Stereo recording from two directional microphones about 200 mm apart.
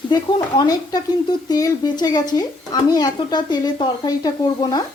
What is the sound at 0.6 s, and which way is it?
Speech, 20° left (ahead or behind).